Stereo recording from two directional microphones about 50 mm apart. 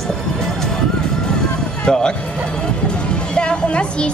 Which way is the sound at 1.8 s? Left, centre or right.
Centre.